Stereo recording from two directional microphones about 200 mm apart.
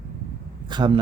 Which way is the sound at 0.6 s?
25° right (ahead or behind).